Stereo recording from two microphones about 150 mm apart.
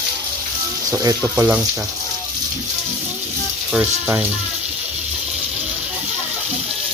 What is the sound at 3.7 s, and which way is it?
Speech, 10° right (ahead or behind).